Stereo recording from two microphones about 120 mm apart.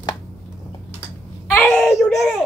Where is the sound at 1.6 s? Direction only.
Centre (ahead or behind).